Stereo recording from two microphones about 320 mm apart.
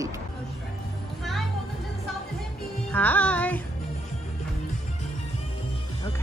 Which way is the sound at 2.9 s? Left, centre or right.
Centre.